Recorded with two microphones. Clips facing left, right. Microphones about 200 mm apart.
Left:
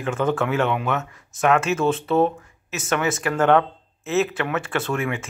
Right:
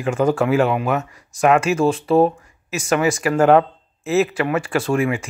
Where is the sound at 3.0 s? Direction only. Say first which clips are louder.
Right 5 dB; 10° right (ahead or behind).